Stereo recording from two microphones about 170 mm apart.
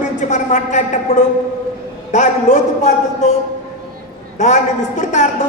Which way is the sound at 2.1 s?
45° left (ahead or behind).